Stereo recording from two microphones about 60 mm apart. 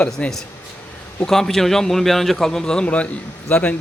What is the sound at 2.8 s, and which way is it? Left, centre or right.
Speech, left.